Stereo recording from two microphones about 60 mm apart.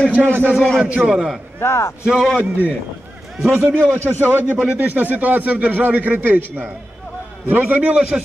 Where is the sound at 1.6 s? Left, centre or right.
Left.